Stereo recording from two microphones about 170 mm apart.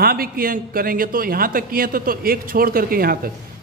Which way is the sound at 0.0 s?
60° right (ahead or behind).